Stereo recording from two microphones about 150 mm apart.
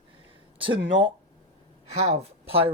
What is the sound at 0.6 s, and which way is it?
Speech, 35° right (ahead or behind).